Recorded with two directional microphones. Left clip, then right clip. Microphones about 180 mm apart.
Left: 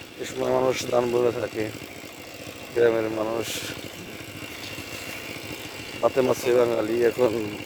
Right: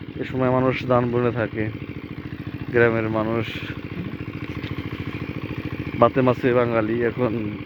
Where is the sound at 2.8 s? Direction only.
5° left (ahead or behind).